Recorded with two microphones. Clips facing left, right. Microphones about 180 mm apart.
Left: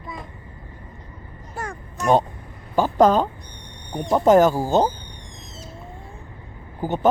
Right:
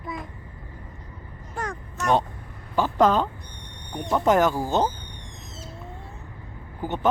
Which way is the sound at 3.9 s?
35° left (ahead or behind).